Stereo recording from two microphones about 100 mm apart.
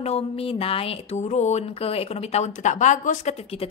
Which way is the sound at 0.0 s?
85° left.